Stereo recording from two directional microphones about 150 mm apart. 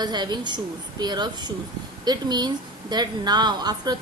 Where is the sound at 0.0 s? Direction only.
30° right (ahead or behind).